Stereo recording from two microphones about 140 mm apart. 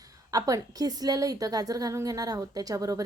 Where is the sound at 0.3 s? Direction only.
25° right (ahead or behind).